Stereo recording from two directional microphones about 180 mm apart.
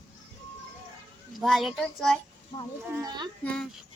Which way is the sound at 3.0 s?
25° right (ahead or behind).